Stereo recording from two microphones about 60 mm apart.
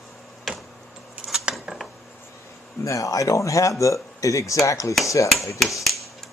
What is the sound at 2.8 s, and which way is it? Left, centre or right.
Speech, left.